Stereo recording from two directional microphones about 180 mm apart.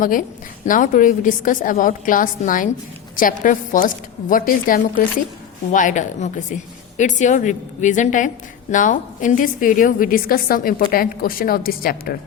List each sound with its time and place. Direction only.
0.0 s a woman's voice: 50° left (ahead or behind)